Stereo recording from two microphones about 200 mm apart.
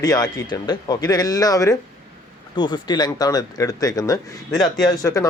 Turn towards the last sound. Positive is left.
turn(degrees=15)  # may be behind; listen again after turning